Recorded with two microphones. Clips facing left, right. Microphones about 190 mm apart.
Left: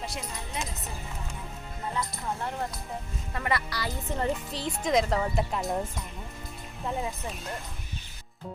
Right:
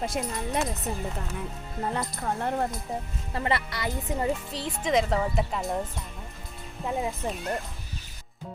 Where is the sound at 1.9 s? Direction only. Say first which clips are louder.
Right 3 dB; 55° right (ahead or behind).